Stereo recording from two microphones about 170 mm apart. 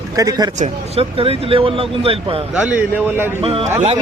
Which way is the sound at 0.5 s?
40° right (ahead or behind).